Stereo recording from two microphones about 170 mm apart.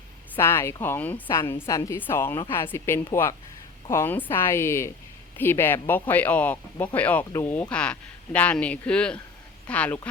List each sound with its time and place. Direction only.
0.3 s speech: 15° left (ahead or behind)